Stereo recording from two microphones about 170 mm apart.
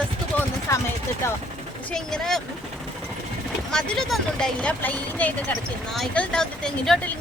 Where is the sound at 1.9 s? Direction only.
5° left (ahead or behind).